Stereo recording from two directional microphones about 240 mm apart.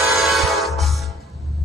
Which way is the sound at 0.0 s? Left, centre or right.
Centre.